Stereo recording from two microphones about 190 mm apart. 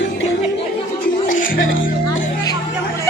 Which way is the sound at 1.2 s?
45° left (ahead or behind).